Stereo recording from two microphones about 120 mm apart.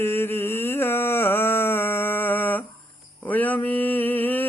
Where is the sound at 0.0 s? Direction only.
20° left (ahead or behind).